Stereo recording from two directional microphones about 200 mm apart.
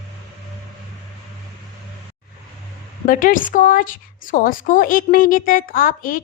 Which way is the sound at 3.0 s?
45° left (ahead or behind).